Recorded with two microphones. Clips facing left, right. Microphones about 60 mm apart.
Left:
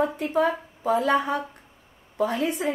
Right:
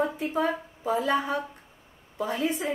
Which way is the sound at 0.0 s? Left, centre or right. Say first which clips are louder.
Left 4 dB; left.